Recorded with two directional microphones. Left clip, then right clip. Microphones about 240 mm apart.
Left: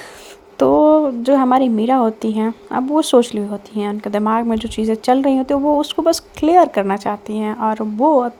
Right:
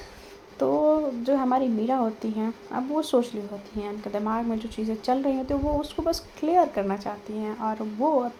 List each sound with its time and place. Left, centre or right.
0.6 s speech: left